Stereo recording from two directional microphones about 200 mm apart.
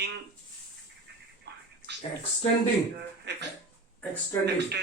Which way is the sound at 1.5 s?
55° right (ahead or behind).